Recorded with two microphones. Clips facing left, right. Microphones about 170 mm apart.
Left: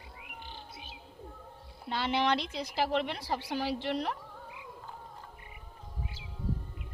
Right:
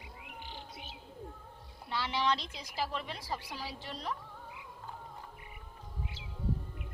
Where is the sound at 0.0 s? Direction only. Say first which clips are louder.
Even; 15° right (ahead or behind).